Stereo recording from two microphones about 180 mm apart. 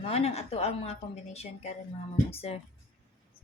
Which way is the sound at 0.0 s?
35° left (ahead or behind).